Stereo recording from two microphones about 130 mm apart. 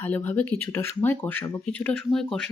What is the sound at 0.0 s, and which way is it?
Speech, 15° left (ahead or behind).